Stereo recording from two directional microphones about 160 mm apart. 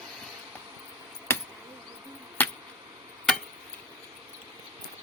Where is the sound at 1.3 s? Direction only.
15° left (ahead or behind).